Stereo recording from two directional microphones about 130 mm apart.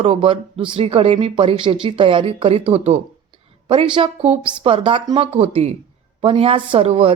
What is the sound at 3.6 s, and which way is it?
Speech, 40° right (ahead or behind).